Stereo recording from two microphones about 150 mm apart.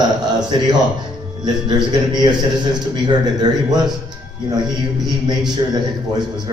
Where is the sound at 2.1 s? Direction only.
30° right (ahead or behind).